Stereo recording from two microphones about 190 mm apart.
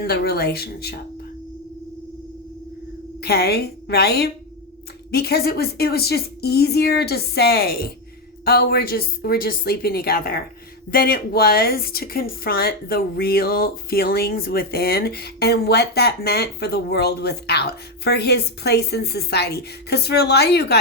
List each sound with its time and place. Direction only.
0.1 s speech: 55° left (ahead or behind)
3.2 s a woman's voice: 55° left (ahead or behind)